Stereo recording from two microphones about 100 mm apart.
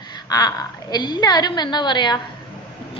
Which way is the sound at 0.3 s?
40° left (ahead or behind).